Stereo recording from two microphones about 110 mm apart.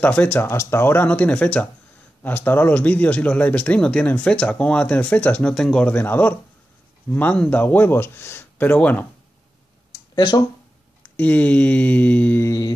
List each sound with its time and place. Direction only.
0.0 s speech: 15° left (ahead or behind)
10.1 s speech: 40° left (ahead or behind)
11.1 s speech: 15° left (ahead or behind)
12.4 s mantra: 35° left (ahead or behind)